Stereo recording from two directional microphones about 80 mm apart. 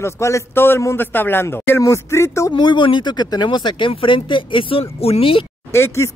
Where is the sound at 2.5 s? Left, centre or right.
Left.